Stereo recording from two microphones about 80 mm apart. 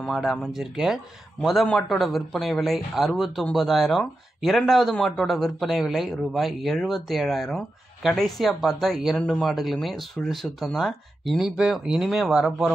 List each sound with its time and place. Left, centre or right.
0.1 s speech: centre